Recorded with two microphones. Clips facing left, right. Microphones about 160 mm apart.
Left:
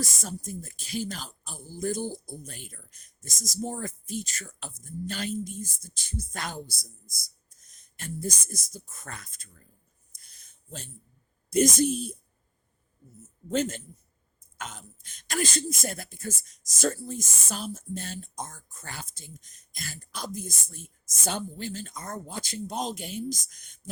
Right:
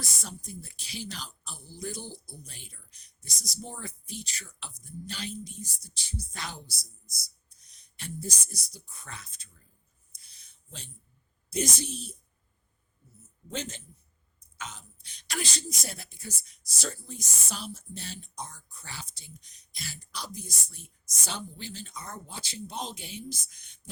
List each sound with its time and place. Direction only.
0.0 s speech: 45° left (ahead or behind)
10.2 s a sound: 50° left (ahead or behind)
11.5 s speech: 50° left (ahead or behind)